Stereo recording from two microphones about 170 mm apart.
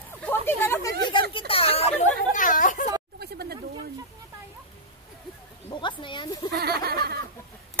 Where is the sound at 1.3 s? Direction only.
35° left (ahead or behind).